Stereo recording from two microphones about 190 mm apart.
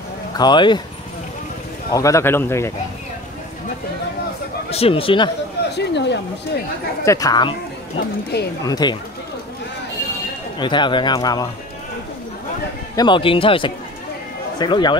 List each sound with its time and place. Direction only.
0.4 s a man's voice: 25° left (ahead or behind)
1.9 s speech: 15° left (ahead or behind)
4.6 s a man's voice: 30° left (ahead or behind)
5.8 s speech: 65° left (ahead or behind)
7.1 s a man's voice: 20° left (ahead or behind)
8.3 s speech: 60° left (ahead or behind)
8.6 s a man's voice: 20° left (ahead or behind)
10.6 s a man's voice: 25° left (ahead or behind)
12.9 s a man's voice: 25° left (ahead or behind)